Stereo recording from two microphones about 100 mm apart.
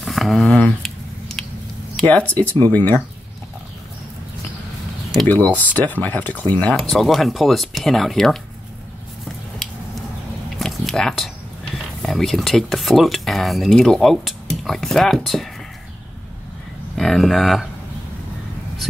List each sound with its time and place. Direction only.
0.0 s squish: centre (ahead or behind)
0.6 s a sound: 5° left (ahead or behind)
2.0 s speech: 15° left (ahead or behind)
5.2 s speech: 15° left (ahead or behind)
6.6 s speech: 5° left (ahead or behind)
10.6 s a sound: 5° left (ahead or behind)
12.0 s speech: centre (ahead or behind)
16.9 s speech: 5° left (ahead or behind)